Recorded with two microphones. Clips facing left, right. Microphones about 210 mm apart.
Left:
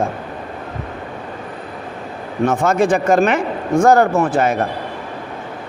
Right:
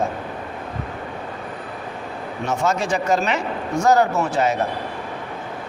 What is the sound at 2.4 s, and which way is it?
A man's voice, 55° left (ahead or behind).